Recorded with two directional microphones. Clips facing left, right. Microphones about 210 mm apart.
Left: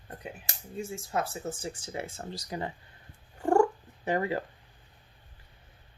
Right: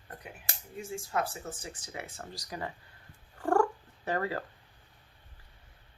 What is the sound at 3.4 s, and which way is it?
Cat, 15° left (ahead or behind).